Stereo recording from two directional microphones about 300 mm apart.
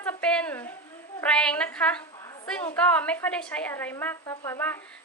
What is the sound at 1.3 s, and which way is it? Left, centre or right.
A woman's voice, centre.